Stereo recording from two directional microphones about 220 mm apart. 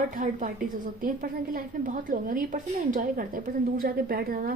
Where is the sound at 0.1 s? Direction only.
35° right (ahead or behind).